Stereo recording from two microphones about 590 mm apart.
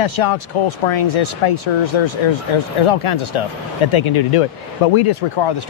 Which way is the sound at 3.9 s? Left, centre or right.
Left.